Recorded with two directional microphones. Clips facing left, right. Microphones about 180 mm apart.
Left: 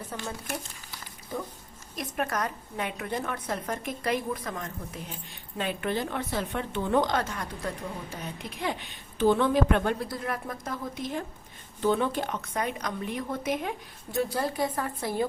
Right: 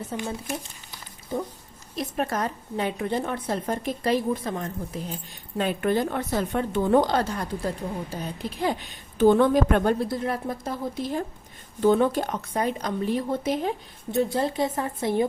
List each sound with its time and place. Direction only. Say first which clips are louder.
0.1 s a woman's voice: right 4 dB; 15° right (ahead or behind)
5.5 s a woman's voice: right 6 dB; 45° right (ahead or behind)
10.1 s a woman's voice: right 6 dB; 25° right (ahead or behind)
11.8 s a woman's voice: right 6 dB; 45° right (ahead or behind); by 15.3 s 20° right (ahead or behind)